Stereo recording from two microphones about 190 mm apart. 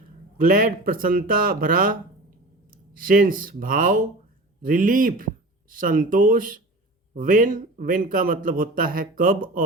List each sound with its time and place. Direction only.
0.3 s a man's voice: 45° right (ahead or behind)